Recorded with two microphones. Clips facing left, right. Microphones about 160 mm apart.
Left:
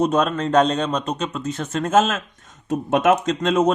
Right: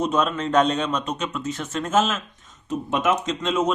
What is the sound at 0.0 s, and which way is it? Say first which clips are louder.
Speech: left 3 dB; 40° left (ahead or behind).